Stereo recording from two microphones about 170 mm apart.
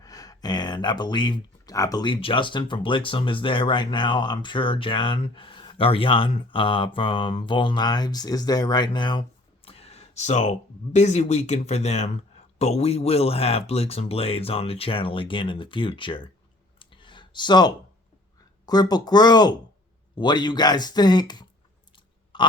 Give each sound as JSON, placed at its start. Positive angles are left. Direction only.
{"t": 0.0, "sound": "speech", "side_deg": 20}
{"t": 9.6, "sound": "a sound", "side_deg": 35}
{"t": 10.9, "sound": "speech", "side_deg": 40}
{"t": 16.8, "sound": "clicking", "side_deg": 30}
{"t": 18.6, "sound": "speech", "side_deg": 25}
{"t": 22.3, "sound": "burping", "side_deg": 30}